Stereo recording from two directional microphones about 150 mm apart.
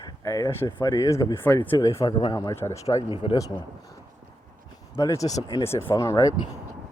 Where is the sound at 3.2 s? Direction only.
40° left (ahead or behind).